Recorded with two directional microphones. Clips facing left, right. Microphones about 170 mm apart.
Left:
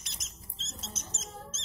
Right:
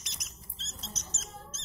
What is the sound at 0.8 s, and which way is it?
Rodents, 5° left (ahead or behind).